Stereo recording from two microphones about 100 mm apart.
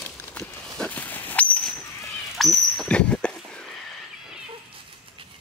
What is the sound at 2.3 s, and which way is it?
Dog, centre (ahead or behind).